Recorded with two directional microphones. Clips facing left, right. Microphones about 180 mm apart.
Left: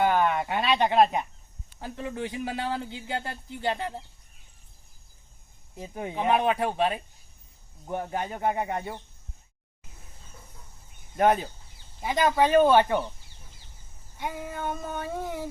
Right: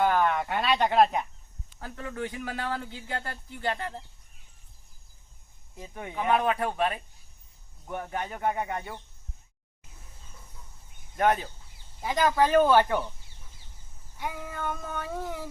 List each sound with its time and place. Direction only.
0.0 s speech: 10° left (ahead or behind)
1.8 s speech: 25° left (ahead or behind)
5.7 s speech: 30° left (ahead or behind)
11.2 s speech: 30° left (ahead or behind)
12.8 s speech: centre (ahead or behind)
14.2 s child singing: 25° left (ahead or behind)
14.5 s a sound: 5° left (ahead or behind)